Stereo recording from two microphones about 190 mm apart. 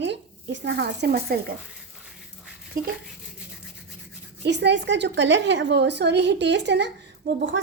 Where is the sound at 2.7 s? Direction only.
45° right (ahead or behind).